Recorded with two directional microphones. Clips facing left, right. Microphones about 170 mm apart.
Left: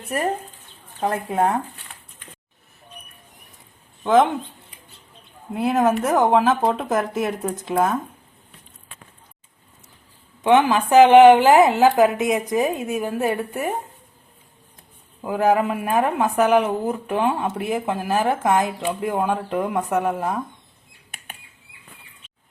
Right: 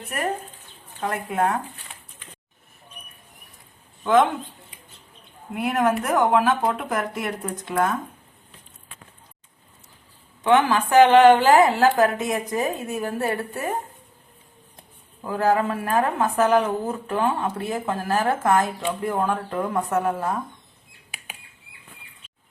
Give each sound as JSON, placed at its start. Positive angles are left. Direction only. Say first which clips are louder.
{"t": 1.0, "sound": "a woman's voice", "louder": "left 3 dB", "side_deg": 25}
{"t": 4.0, "sound": "speech", "louder": "left 2 dB", "side_deg": 20}
{"t": 5.5, "sound": "a woman's voice", "louder": "left 3 dB", "side_deg": 25}
{"t": 10.4, "sound": "a woman's voice", "louder": "left 2 dB", "side_deg": 20}
{"t": 15.2, "sound": "a woman's voice", "louder": "left 2 dB", "side_deg": 15}